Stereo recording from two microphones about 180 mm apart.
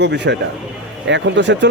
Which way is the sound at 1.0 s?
85° right.